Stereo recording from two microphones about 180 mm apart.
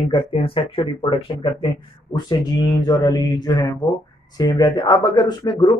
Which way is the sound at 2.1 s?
20° left (ahead or behind).